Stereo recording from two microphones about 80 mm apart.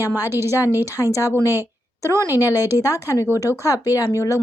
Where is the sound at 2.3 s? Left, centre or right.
Right.